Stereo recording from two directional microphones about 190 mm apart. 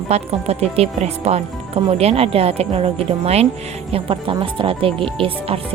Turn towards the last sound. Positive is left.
turn(degrees=-30)  # may be behind; listen again after turning